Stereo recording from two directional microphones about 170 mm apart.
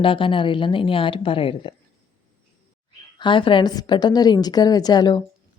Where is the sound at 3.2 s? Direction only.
30° left (ahead or behind).